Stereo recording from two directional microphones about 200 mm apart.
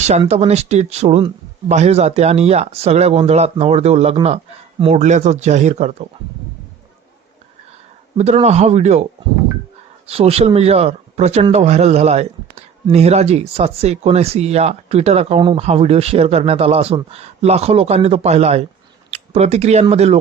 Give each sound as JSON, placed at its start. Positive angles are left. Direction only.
{"t": 0.0, "sound": "speech", "side_deg": -35}
{"t": 8.2, "sound": "speech", "side_deg": -30}
{"t": 10.1, "sound": "speech", "side_deg": -30}